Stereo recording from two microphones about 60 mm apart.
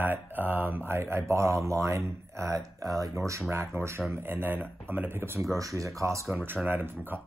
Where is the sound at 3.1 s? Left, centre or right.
Right.